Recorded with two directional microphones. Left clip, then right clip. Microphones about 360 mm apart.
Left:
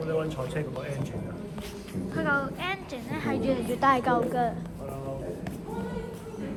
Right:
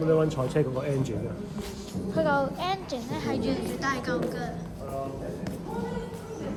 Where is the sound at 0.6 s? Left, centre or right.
Right.